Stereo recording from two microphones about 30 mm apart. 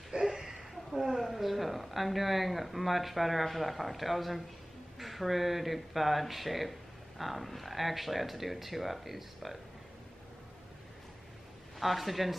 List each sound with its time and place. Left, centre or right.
0.3 s a sound: centre
1.1 s speech: centre
11.8 s speech: centre